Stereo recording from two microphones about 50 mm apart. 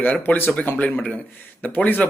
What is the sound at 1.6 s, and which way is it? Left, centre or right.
Speech, left.